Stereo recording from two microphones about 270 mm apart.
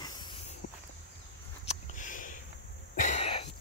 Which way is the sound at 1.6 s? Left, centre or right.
Left.